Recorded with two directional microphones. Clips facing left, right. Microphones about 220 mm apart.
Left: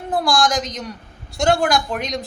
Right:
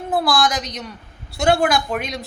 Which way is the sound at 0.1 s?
5° right (ahead or behind).